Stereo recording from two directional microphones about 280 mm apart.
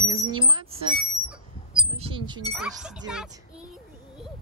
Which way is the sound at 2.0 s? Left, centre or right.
Centre.